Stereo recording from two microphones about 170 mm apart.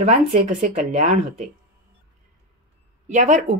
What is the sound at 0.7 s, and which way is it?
Speech, 50° right (ahead or behind).